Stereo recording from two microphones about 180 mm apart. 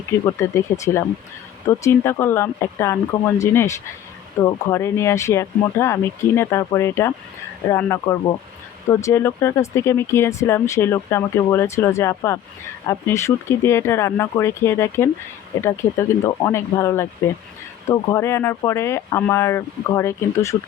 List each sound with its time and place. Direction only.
0.3 s speech: 15° left (ahead or behind)